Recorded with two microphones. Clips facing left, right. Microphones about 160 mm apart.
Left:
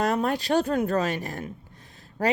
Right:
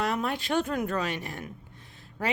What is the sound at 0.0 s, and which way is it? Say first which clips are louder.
Speech: left 5 dB; 40° left (ahead or behind).